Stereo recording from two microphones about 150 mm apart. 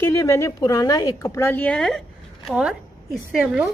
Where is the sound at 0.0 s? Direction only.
20° left (ahead or behind); by 3.6 s 5° right (ahead or behind).